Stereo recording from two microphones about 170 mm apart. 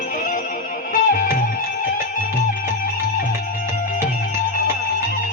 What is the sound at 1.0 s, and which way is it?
Music, 50° left (ahead or behind).